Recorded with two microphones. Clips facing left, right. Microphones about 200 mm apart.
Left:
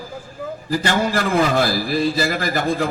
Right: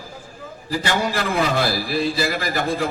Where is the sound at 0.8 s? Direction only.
45° left (ahead or behind).